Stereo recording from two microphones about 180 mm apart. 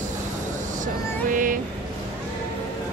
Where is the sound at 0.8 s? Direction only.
50° right (ahead or behind).